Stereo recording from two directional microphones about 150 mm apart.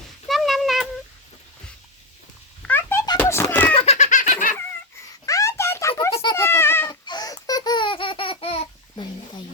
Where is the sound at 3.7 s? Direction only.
40° left (ahead or behind); by 4.5 s 60° left (ahead or behind).